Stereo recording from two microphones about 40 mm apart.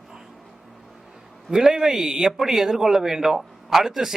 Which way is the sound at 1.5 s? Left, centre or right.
Centre.